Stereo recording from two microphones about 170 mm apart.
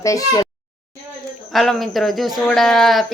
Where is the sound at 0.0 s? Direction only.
20° left (ahead or behind).